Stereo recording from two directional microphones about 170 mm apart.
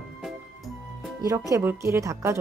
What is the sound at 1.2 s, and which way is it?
Speech, 20° right (ahead or behind).